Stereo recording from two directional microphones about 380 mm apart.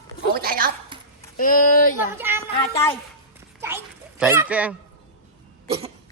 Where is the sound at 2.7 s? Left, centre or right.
Centre.